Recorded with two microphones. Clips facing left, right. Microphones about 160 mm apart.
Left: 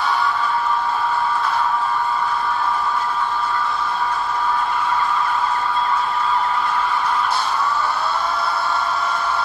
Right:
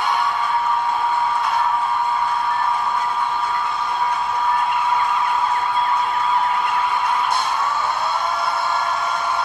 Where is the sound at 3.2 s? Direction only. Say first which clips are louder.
Even; 20° right (ahead or behind).